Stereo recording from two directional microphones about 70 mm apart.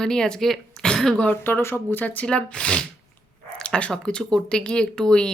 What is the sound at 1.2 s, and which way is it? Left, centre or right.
Speech, left.